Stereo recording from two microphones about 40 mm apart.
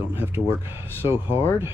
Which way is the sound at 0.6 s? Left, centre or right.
Right.